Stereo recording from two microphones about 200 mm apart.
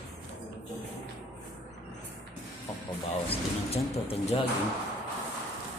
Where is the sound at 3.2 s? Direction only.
30° left (ahead or behind).